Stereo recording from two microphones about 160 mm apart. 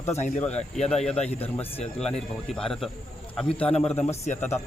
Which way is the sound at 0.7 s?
45° left (ahead or behind).